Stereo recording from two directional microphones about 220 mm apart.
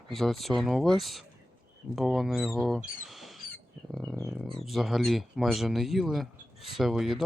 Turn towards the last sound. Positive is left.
turn(degrees=0)  # may be behind; listen again after turning